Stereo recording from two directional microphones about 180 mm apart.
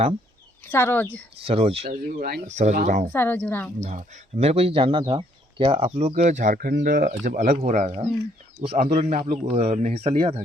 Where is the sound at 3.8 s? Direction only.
45° right (ahead or behind).